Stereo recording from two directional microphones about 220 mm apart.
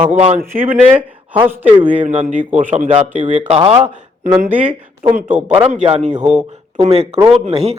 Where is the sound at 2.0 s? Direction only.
35° right (ahead or behind).